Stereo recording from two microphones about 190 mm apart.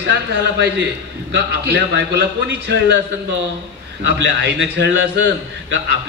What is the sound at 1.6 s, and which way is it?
A man's voice, 60° right (ahead or behind).